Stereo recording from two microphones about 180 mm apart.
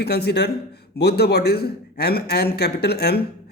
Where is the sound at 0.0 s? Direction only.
65° left (ahead or behind).